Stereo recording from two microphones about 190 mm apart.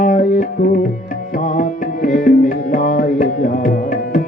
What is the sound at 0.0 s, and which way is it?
Music, 40° left (ahead or behind).